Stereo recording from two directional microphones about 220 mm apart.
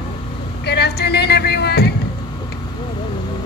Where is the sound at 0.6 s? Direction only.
50° left (ahead or behind).